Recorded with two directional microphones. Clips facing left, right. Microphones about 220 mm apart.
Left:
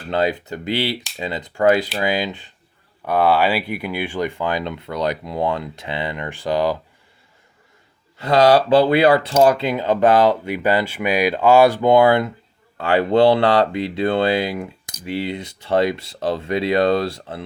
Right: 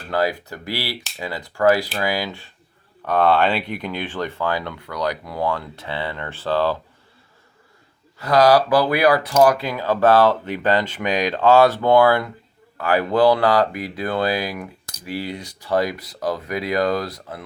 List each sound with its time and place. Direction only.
0.1 s speech: 20° left (ahead or behind)
8.2 s speech: 25° left (ahead or behind)